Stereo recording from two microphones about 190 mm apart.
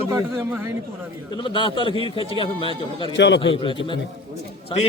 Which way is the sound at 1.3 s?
25° left (ahead or behind).